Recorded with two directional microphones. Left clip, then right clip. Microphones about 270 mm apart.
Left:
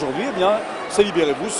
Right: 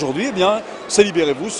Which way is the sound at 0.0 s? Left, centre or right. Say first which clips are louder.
Right 2 dB; right.